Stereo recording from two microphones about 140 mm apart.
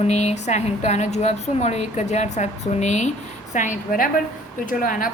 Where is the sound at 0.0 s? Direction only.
50° left (ahead or behind).